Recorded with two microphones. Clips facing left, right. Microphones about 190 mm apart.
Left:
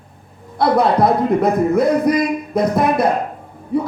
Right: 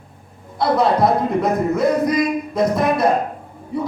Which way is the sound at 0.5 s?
55° left (ahead or behind).